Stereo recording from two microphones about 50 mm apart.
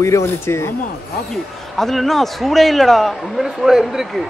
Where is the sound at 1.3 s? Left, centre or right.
Centre.